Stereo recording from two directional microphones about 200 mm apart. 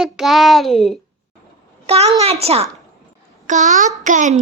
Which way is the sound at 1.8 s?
30° right (ahead or behind).